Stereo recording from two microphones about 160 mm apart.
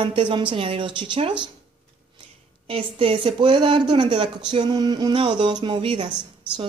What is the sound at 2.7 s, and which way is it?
Speech, 35° right (ahead or behind).